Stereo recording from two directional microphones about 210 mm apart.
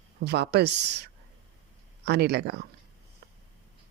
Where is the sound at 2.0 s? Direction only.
50° right (ahead or behind).